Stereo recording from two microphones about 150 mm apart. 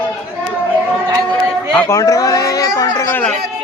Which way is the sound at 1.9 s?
25° left (ahead or behind).